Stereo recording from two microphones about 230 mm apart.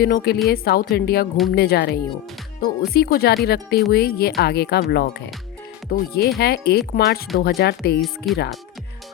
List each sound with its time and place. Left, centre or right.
0.0 s speech: left
8.0 s speech: centre